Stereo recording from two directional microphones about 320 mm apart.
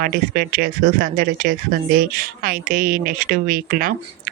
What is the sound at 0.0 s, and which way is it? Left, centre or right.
A child's voice, right.